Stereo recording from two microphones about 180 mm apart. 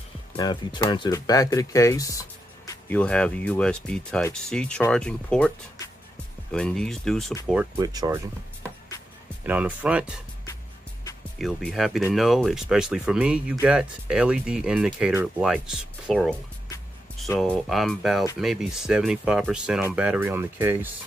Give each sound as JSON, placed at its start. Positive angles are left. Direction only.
{"t": 0.4, "sound": "speech", "side_deg": 25}
{"t": 2.9, "sound": "speech", "side_deg": 5}
{"t": 6.5, "sound": "speech", "side_deg": 5}
{"t": 7.8, "sound": "speech", "side_deg": -20}
{"t": 9.4, "sound": "speech", "side_deg": -10}
{"t": 11.3, "sound": "speech", "side_deg": 0}
{"t": 17.4, "sound": "speech", "side_deg": 5}